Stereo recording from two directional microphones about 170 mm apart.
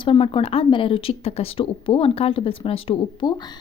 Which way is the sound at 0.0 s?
30° left (ahead or behind).